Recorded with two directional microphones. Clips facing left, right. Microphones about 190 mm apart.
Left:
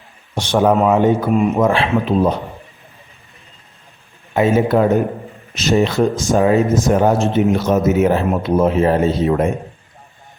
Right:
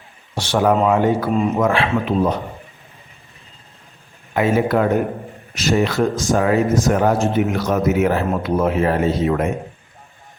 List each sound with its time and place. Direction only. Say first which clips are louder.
0.3 s speech: left 2 dB; 15° left (ahead or behind)
1.3 s speech: left 3 dB; 10° left (ahead or behind)
1.6 s speech: left 2 dB; 30° left (ahead or behind)
4.4 s speech: left 3 dB; 25° left (ahead or behind)